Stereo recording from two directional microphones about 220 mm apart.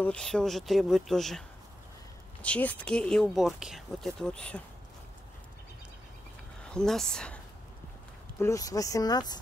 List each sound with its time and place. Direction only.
0.0 s speech: 5° left (ahead or behind)
2.4 s speech: 5° left (ahead or behind)
6.6 s speech: 5° left (ahead or behind)
8.4 s speech: 15° left (ahead or behind)